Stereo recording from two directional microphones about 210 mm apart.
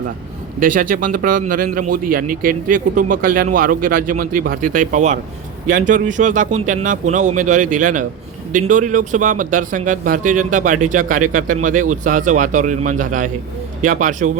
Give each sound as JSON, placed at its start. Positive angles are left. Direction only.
{"t": 0.6, "sound": "a man's voice", "side_deg": -40}